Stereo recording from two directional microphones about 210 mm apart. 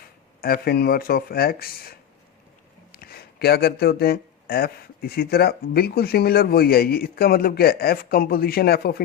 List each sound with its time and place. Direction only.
0.4 s speech: 45° left (ahead or behind)
2.9 s speech: 45° left (ahead or behind)